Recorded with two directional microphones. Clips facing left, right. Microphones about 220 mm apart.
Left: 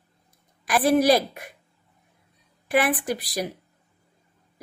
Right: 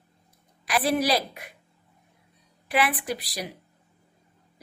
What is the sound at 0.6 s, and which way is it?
Speech, 50° left (ahead or behind).